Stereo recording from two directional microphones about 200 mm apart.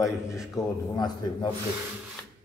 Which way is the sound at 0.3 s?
15° left (ahead or behind).